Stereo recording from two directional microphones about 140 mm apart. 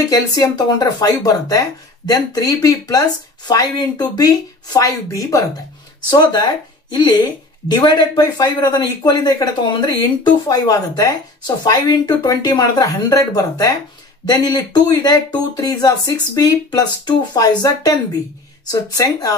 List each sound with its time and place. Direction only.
0.1 s speech: 30° left (ahead or behind)